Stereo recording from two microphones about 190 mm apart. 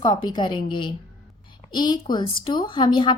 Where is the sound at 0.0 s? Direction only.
20° left (ahead or behind).